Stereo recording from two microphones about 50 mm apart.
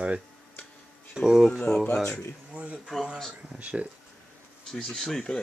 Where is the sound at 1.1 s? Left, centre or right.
Centre.